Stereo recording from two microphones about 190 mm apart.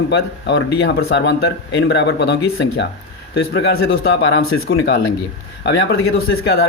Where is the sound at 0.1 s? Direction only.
65° left (ahead or behind).